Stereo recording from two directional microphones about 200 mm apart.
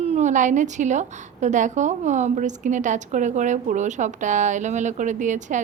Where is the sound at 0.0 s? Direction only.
35° right (ahead or behind).